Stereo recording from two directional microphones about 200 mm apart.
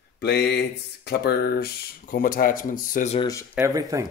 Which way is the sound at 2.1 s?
45° left (ahead or behind).